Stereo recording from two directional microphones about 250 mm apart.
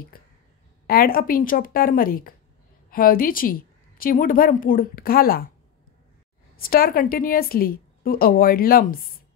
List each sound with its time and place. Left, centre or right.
0.8 s a woman's voice: left
6.5 s a woman's voice: left